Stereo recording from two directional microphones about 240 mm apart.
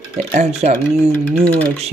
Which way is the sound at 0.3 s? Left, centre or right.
Right.